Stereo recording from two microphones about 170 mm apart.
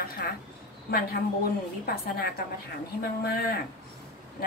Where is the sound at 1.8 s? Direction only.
60° left (ahead or behind).